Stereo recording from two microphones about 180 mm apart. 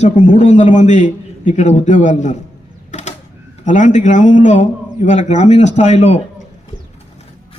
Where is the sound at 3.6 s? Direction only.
45° left (ahead or behind).